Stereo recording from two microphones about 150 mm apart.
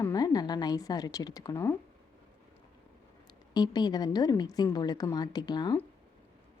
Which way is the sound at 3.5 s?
30° left (ahead or behind).